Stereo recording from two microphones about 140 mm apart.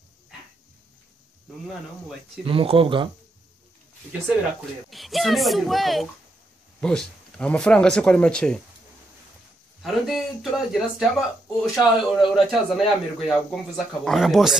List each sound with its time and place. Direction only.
2.4 s speech: 40° right (ahead or behind)
4.8 s speech: centre (ahead or behind)
9.8 s speech: centre (ahead or behind)